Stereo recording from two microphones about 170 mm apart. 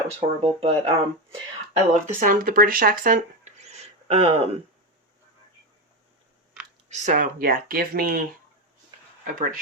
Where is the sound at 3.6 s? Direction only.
40° right (ahead or behind).